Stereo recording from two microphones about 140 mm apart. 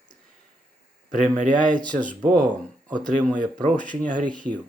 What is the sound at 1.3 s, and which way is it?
Speech, 65° right (ahead or behind).